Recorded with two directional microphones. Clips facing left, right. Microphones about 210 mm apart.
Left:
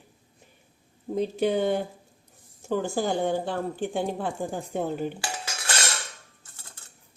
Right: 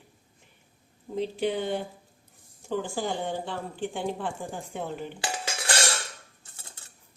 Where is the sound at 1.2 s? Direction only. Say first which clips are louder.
Left 4 dB; 45° left (ahead or behind).